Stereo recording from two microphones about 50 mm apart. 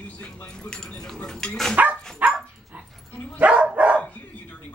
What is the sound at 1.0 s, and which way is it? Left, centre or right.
Cutlery, centre.